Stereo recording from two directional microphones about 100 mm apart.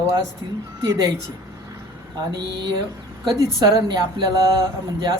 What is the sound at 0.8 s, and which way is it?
Speech, 35° right (ahead or behind).